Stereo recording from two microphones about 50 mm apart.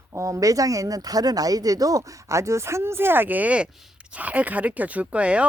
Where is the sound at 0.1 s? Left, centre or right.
Right.